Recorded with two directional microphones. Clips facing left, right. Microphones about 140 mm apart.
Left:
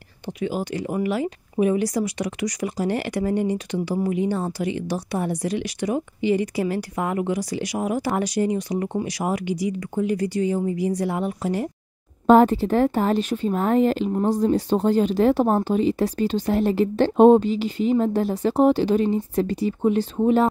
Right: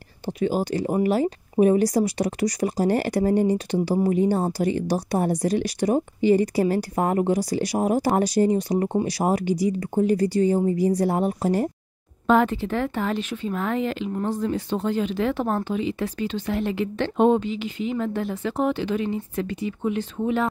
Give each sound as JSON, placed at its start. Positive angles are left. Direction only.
{"t": 0.4, "sound": "speech", "side_deg": -35}
{"t": 12.3, "sound": "speech", "side_deg": 40}